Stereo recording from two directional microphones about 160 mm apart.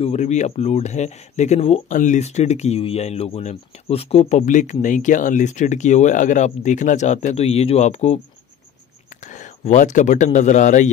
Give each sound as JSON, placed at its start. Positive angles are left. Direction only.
{"t": 0.0, "sound": "speech", "side_deg": 45}
{"t": 1.9, "sound": "speech", "side_deg": 50}
{"t": 9.3, "sound": "speech", "side_deg": 50}